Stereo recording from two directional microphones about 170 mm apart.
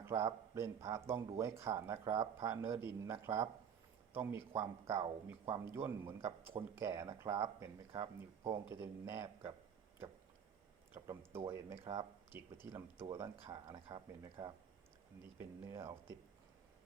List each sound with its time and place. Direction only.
0.0 s speech: 15° right (ahead or behind)
10.9 s speech: 15° right (ahead or behind)
15.2 s speech: 15° right (ahead or behind)